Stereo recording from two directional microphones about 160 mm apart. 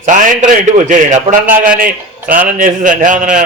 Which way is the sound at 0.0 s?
50° right (ahead or behind).